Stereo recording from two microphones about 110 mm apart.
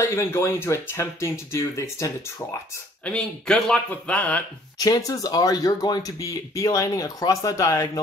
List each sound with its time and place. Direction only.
0.0 s speech: 25° left (ahead or behind)
3.1 s a man's voice: 5° left (ahead or behind)
4.7 s speech: 35° left (ahead or behind)